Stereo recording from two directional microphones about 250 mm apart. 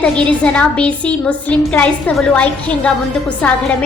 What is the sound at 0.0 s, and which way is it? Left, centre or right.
A woman's voice, centre.